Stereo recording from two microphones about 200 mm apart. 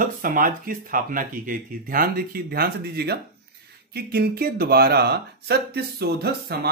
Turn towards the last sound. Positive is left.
turn(degrees=-55)  # may be behind; listen again after turning